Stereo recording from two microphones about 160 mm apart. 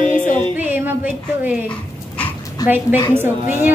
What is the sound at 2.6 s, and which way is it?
Speech, 25° left (ahead or behind).